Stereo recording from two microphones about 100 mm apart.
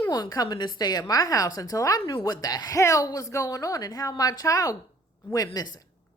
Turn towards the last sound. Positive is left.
turn(degrees=40)  # may be behind; listen again after turning